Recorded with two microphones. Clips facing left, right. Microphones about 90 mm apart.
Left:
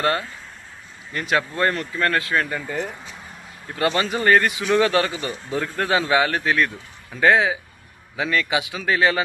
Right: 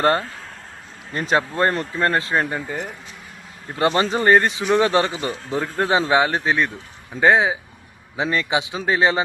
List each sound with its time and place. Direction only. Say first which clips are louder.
0.0 s a man's voice: right 4 dB; 35° right (ahead or behind)
2.6 s speech: left 1 dB; 10° right (ahead or behind)
3.8 s a man's voice: right 3 dB; 30° right (ahead or behind)